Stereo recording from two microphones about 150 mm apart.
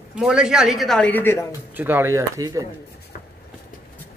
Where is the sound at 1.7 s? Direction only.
15° right (ahead or behind).